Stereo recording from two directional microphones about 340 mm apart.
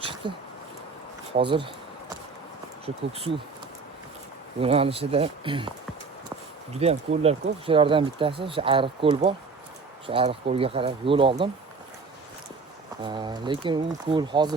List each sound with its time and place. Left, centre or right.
0.0 s a sound: centre
1.4 s speech: centre
2.8 s speech: centre
4.6 s speech: centre
6.7 s speech: centre
13.0 s speech: centre